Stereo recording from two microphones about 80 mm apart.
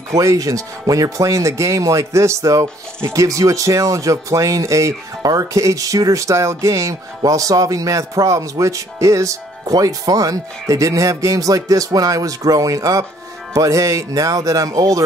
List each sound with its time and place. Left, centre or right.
0.1 s speech: right